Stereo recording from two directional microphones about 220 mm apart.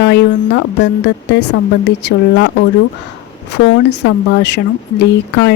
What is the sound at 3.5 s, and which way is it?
Speech, 55° left (ahead or behind).